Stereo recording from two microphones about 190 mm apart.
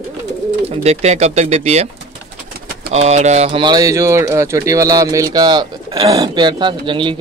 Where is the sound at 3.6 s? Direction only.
20° right (ahead or behind).